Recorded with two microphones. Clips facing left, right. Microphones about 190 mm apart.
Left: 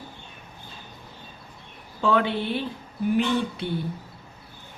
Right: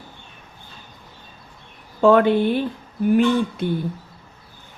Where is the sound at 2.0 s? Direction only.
50° right (ahead or behind).